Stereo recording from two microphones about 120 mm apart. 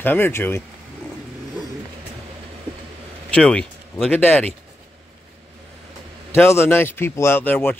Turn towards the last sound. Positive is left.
turn(degrees=15)  # may be behind; listen again after turning